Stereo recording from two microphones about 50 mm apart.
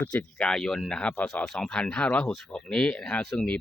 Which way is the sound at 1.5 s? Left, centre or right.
Centre.